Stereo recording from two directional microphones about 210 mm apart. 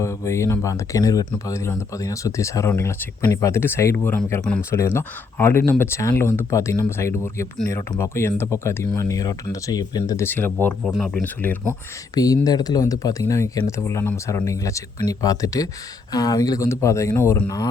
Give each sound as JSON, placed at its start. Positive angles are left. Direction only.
{"t": 0.0, "sound": "speech", "side_deg": 15}
{"t": 12.1, "sound": "speech", "side_deg": 15}